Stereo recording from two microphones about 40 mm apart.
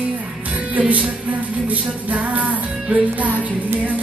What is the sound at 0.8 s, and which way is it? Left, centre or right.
Music, right.